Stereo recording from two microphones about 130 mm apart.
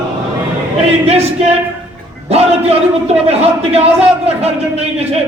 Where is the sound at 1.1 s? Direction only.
55° right (ahead or behind).